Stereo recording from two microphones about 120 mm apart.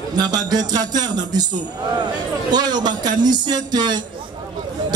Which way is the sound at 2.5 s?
35° right (ahead or behind).